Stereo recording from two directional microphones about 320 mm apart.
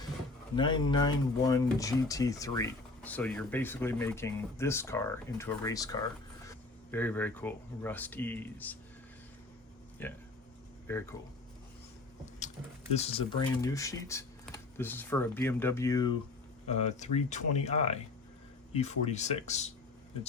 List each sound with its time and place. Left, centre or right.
0.5 s speech: centre
10.0 s speech: centre
12.9 s speech: centre